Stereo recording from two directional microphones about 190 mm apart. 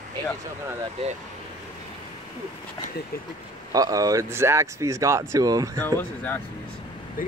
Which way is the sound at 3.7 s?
20° right (ahead or behind).